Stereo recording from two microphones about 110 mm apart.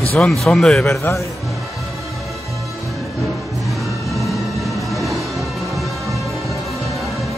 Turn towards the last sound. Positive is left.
turn(degrees=0)  # may be behind; listen again after turning